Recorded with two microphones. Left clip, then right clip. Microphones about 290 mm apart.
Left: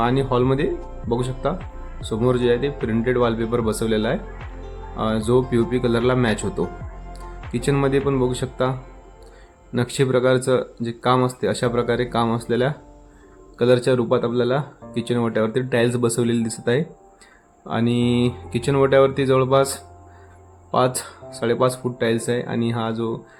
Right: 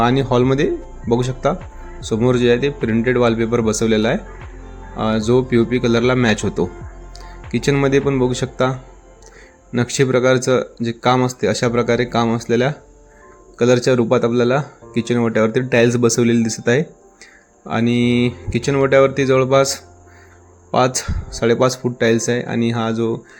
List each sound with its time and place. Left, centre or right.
0.0 s speech: centre
9.7 s speech: centre